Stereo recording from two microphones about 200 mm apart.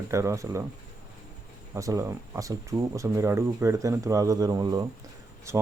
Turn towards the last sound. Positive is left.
turn(degrees=-15)  # may be behind; listen again after turning